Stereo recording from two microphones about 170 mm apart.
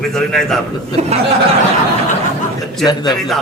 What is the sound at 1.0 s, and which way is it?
Speech, 40° right (ahead or behind).